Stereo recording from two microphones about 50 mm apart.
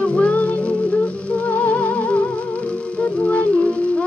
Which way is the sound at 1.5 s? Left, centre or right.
Left.